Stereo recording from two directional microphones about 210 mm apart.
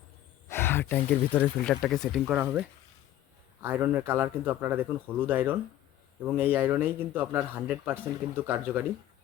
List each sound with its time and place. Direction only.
0.4 s speech: 10° left (ahead or behind); by 8.8 s 10° right (ahead or behind)